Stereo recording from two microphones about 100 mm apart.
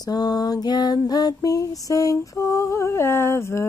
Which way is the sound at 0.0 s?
40° left (ahead or behind).